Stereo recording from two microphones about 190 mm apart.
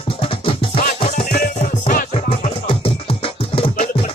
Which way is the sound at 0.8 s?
45° left (ahead or behind).